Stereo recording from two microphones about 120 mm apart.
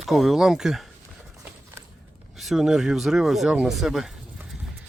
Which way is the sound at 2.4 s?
Centre (ahead or behind).